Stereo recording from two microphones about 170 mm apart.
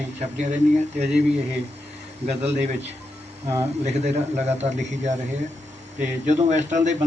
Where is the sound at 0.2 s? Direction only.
45° right (ahead or behind).